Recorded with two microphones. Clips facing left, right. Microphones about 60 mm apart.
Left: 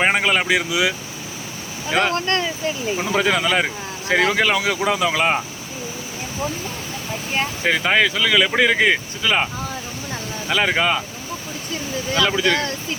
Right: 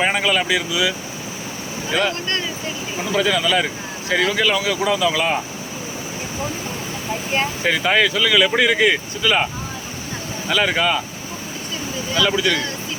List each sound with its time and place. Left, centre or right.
0.0 s speech: left
3.0 s speech: left
7.3 s speech: centre
10.5 s speech: centre
12.2 s speech: centre
12.5 s speech: left